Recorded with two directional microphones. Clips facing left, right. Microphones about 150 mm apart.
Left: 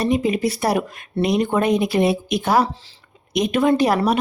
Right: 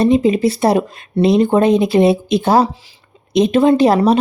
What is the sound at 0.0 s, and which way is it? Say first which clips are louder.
A woman's voice: right 7 dB; 25° right (ahead or behind).